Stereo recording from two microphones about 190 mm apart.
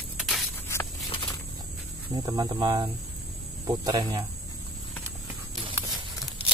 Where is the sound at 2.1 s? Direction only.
20° right (ahead or behind).